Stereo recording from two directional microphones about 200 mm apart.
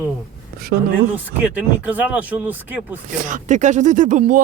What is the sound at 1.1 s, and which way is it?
Speech, 5° right (ahead or behind).